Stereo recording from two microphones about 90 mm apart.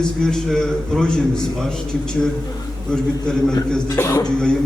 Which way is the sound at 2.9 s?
10° left (ahead or behind).